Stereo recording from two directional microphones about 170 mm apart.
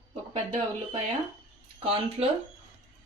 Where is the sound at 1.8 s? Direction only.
35° right (ahead or behind).